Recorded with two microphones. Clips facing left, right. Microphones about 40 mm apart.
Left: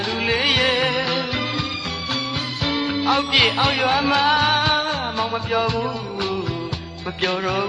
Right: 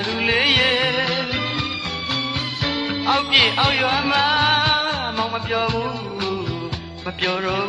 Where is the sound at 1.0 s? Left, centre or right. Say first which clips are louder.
Right 1 dB; right.